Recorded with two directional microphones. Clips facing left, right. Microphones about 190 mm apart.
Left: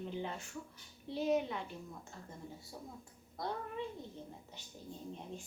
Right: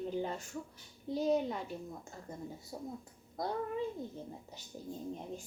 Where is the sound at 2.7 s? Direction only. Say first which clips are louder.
Right 7 dB; 40° right (ahead or behind).